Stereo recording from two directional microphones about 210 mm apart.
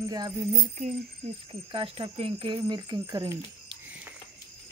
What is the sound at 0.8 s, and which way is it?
Speech, 35° right (ahead or behind).